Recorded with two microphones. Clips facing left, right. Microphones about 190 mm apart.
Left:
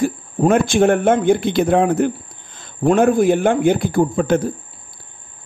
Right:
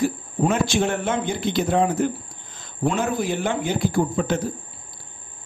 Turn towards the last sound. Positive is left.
turn(degrees=55)  # may be behind; listen again after turning